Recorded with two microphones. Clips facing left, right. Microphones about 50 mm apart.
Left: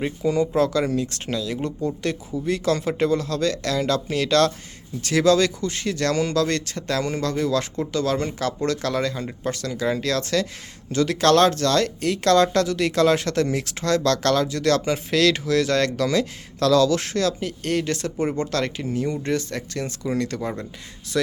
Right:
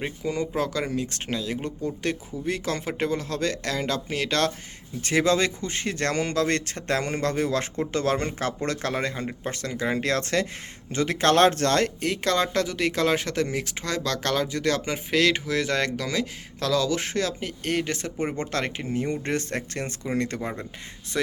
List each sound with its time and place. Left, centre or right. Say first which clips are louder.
0.3 s speech: left 7 dB; centre; by 11.9 s right
11.9 s speech: left 6 dB; right